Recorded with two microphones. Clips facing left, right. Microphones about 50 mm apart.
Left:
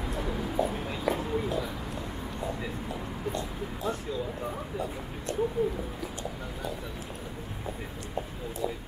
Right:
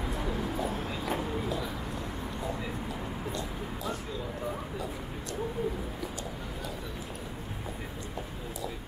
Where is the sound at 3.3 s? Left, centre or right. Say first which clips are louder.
Left 2 dB; left.